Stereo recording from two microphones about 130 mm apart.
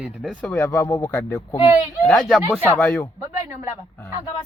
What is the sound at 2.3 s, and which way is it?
Speech, 10° right (ahead or behind).